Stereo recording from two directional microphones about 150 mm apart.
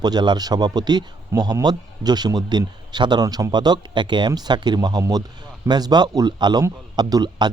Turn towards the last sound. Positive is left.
turn(degrees=-25)  # may be behind; listen again after turning